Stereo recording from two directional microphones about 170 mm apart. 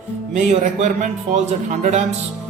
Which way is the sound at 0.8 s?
45° right (ahead or behind).